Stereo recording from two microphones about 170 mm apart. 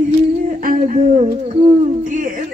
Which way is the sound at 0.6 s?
55° right (ahead or behind).